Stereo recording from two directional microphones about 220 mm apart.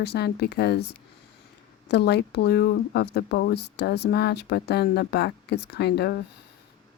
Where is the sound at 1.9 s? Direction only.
50° left (ahead or behind).